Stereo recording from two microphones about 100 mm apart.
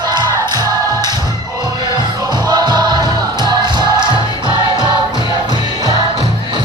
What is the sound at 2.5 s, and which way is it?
Music, 45° right (ahead or behind).